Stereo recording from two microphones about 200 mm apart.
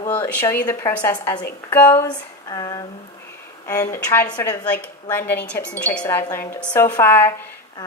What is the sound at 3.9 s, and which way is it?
Speech, 15° left (ahead or behind).